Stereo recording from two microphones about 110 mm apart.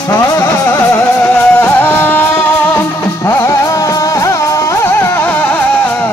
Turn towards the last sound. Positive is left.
turn(degrees=20)  # may be behind; listen again after turning